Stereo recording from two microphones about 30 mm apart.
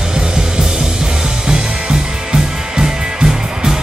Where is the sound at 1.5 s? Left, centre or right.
Right.